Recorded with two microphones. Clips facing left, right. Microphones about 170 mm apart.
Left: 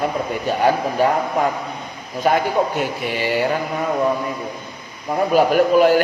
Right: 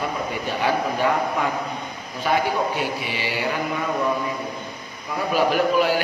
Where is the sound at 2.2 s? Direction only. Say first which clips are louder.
Left 4 dB; 45° left (ahead or behind).